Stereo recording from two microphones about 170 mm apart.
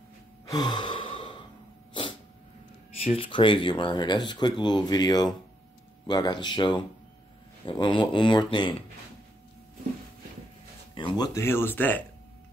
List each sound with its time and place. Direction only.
0.5 s sigh: 25° left (ahead or behind)
2.0 s cat: 30° left (ahead or behind)
3.0 s speech: 35° left (ahead or behind)
11.0 s a sound: 30° left (ahead or behind)
11.3 s speech: 15° left (ahead or behind)